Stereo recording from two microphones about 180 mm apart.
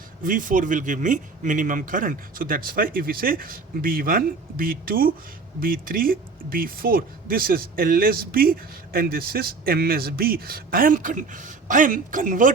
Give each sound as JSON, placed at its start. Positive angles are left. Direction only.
{"t": 0.2, "sound": "speech", "side_deg": -50}